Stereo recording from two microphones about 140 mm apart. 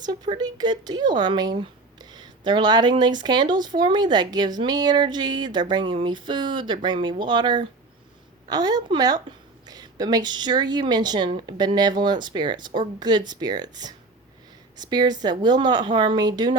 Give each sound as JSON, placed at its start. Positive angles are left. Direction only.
{"t": 0.0, "sound": "a woman's voice", "side_deg": -30}